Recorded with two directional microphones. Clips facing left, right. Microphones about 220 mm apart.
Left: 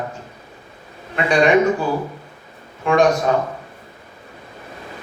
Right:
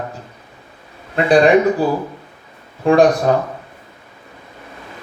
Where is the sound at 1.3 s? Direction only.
35° right (ahead or behind).